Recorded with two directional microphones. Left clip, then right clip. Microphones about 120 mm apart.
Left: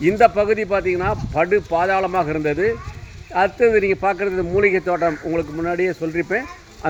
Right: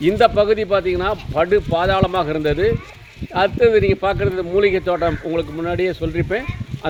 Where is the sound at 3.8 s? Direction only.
35° right (ahead or behind).